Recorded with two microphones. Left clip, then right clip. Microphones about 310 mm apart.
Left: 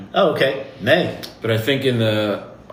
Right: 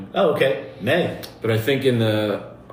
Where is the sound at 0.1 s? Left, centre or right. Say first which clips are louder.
Left 2 dB; left.